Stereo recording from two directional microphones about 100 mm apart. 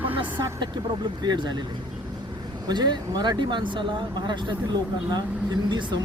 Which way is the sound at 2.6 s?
45° right (ahead or behind).